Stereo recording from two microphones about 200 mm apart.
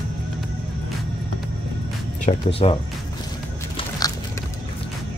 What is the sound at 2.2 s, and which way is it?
Speech, 30° left (ahead or behind).